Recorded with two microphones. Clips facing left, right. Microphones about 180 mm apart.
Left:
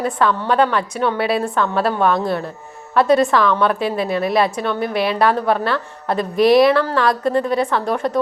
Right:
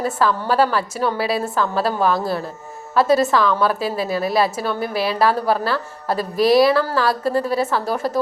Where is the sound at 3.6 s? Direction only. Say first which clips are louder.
Left 2 dB; 30° right (ahead or behind).